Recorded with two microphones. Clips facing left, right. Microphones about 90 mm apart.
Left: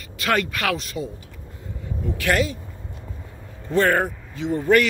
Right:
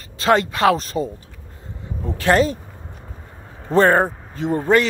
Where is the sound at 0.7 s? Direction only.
40° right (ahead or behind).